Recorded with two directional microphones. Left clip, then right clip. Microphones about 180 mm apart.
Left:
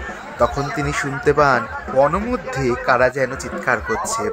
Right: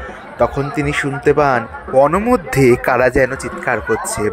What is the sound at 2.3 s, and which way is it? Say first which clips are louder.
Speech: right 9 dB; 40° right (ahead or behind).